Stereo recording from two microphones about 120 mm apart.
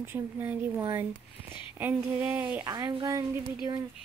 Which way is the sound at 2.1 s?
15° right (ahead or behind).